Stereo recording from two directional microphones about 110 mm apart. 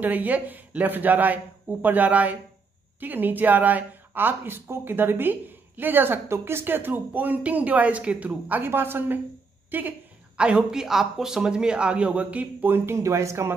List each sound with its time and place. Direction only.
0.0 s speech: 15° right (ahead or behind)